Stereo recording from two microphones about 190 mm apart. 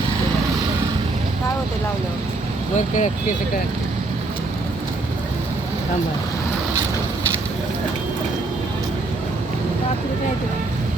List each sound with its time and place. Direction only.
2.7 s speech: 40° left (ahead or behind)